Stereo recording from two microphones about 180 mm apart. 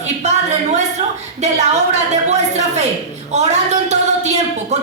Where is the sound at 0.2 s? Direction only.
40° right (ahead or behind).